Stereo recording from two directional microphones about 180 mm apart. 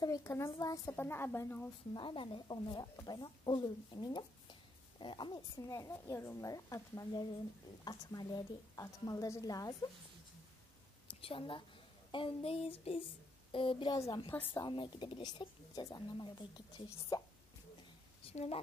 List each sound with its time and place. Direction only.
0.0 s a woman's voice: 15° left (ahead or behind)
2.0 s speech: 25° left (ahead or behind)
11.1 s a woman's voice: 30° left (ahead or behind)
12.1 s a sound: 30° left (ahead or behind)
13.5 s speech: 30° left (ahead or behind)
14.3 s a woman's voice: 10° left (ahead or behind)
14.6 s speech: 25° left (ahead or behind)
18.2 s a woman's voice: 35° left (ahead or behind)